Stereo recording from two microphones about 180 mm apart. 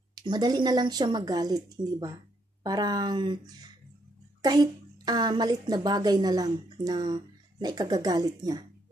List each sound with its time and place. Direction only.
0.1 s a child's voice: 25° right (ahead or behind)